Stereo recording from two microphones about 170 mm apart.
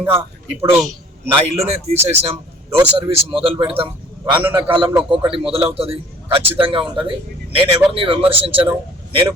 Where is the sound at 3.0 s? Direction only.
30° right (ahead or behind).